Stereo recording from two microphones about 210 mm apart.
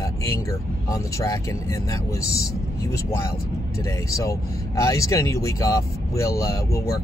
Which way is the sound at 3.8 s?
15° left (ahead or behind).